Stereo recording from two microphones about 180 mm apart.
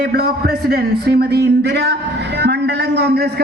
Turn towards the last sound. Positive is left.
turn(degrees=-65)  # may be behind; listen again after turning